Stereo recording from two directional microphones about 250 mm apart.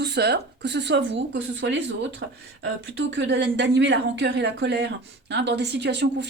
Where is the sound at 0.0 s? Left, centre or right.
Right.